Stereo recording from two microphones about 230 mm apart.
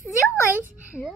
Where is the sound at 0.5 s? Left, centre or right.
Centre.